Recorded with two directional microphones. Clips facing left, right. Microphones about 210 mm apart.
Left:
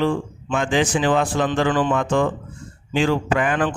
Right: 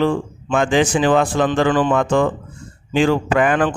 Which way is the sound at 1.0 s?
85° right.